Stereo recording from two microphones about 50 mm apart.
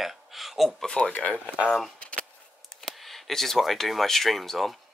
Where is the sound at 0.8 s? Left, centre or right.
Centre.